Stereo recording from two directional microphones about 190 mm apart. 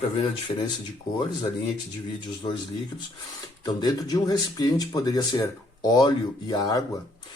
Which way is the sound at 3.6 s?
20° left (ahead or behind).